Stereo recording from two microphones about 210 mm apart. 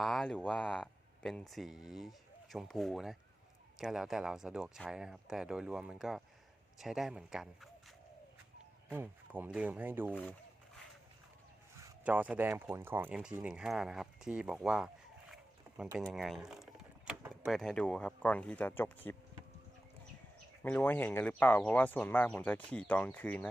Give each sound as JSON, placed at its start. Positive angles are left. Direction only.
{"t": 0.0, "sound": "speech", "side_deg": 0}
{"t": 10.1, "sound": "speech", "side_deg": 5}
{"t": 11.9, "sound": "speech", "side_deg": -5}
{"t": 16.0, "sound": "speech", "side_deg": 0}
{"t": 20.6, "sound": "speech", "side_deg": 10}